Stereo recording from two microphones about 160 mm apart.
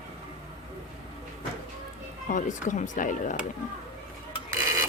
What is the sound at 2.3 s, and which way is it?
A woman's voice, 50° left (ahead or behind).